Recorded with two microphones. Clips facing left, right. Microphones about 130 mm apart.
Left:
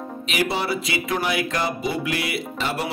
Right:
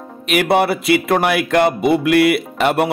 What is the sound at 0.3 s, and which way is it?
Speech, 60° right (ahead or behind).